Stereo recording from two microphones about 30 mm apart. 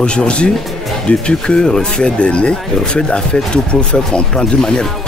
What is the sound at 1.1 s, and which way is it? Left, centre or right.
Speech, left.